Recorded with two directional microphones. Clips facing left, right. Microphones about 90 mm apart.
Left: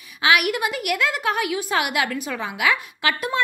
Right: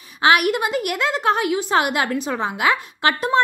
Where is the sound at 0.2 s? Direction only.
35° right (ahead or behind).